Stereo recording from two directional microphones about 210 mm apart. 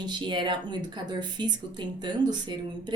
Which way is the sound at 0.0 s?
20° right (ahead or behind).